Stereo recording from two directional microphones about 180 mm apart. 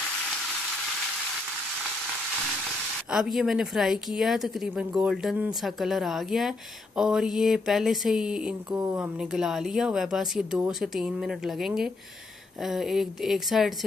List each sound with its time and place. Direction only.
3.1 s a woman's voice: centre (ahead or behind)
8.7 s speech: 20° right (ahead or behind)
9.2 s a woman's voice: centre (ahead or behind)